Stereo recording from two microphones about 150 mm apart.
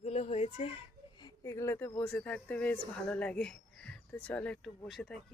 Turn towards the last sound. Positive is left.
turn(degrees=0)  # may be behind; listen again after turning